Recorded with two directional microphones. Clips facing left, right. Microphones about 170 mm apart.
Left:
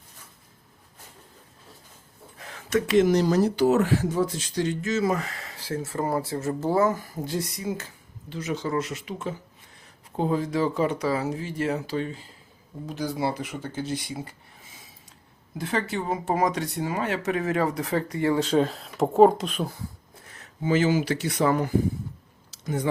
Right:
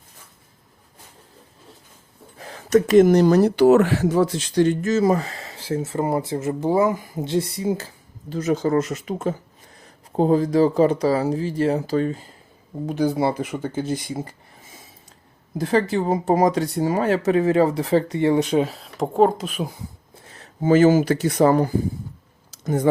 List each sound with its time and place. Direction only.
2.4 s speech: 35° right (ahead or behind)
12.8 s speech: 55° right (ahead or behind)
15.5 s speech: 35° right (ahead or behind); by 18.7 s 15° right (ahead or behind)
18.7 s speech: centre (ahead or behind)
20.2 s a sound: 30° right (ahead or behind)
20.7 s speech: 45° right (ahead or behind)